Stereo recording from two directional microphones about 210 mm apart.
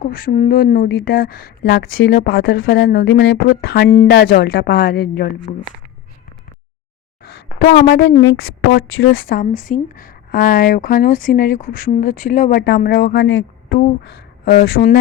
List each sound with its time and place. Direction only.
0.0 s speech: 40° left (ahead or behind)
7.2 s a woman's voice: 50° left (ahead or behind)
8.2 s speech: 65° left (ahead or behind)
9.0 s speech: 45° left (ahead or behind)
12.8 s speech: 55° left (ahead or behind)
14.6 s speech: 45° left (ahead or behind)